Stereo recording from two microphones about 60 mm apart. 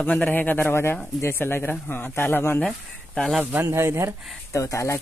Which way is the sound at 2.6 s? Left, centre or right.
Centre.